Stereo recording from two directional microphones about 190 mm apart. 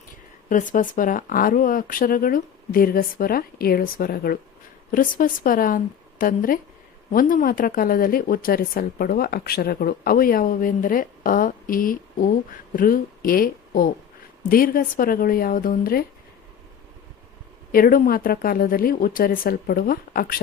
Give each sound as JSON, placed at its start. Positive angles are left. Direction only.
{"t": 0.4, "sound": "speech", "side_deg": 40}
{"t": 17.7, "sound": "speech", "side_deg": 50}